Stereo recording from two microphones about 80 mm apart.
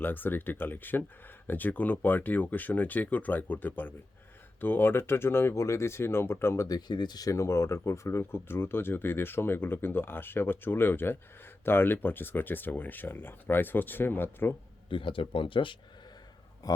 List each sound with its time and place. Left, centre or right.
0.0 s speech: left
6.7 s speech: left
14.8 s speech: left
16.6 s speech: left